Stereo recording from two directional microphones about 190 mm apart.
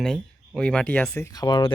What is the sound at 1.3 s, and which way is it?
Speech, 20° left (ahead or behind).